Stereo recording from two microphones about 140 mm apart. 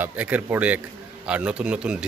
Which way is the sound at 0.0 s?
10° right (ahead or behind).